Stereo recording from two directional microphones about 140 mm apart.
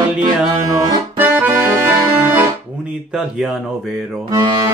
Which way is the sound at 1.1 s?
15° right (ahead or behind).